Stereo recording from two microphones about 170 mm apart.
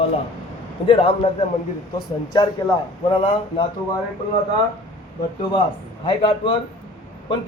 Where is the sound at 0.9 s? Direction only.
35° left (ahead or behind).